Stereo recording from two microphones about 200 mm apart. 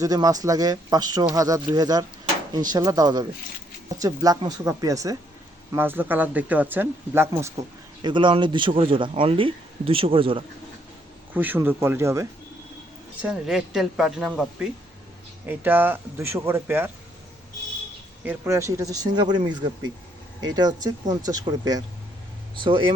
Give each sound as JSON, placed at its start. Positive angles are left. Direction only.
{"t": 0.0, "sound": "speech", "side_deg": -20}
{"t": 8.0, "sound": "speech", "side_deg": -25}
{"t": 11.3, "sound": "speech", "side_deg": -10}
{"t": 13.2, "sound": "a woman's voice", "side_deg": -5}
{"t": 18.3, "sound": "speech", "side_deg": -15}